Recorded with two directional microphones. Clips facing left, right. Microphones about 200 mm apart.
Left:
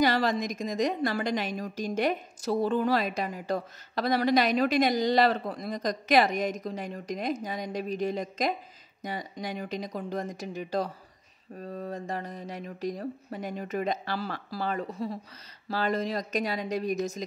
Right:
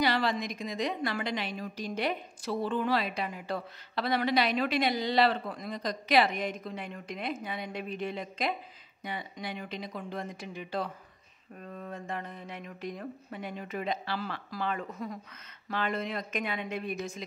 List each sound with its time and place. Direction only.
0.0 s a woman's voice: 45° left (ahead or behind)